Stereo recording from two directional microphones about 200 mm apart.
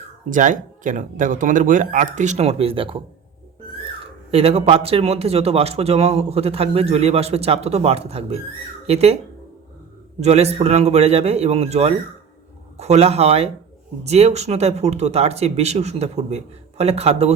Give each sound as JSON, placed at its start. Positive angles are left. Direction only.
{"t": 0.3, "sound": "speech", "side_deg": -40}
{"t": 4.0, "sound": "speech", "side_deg": -30}
{"t": 10.2, "sound": "speech", "side_deg": -30}